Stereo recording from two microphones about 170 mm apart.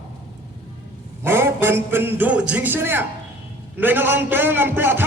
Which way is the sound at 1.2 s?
15° right (ahead or behind).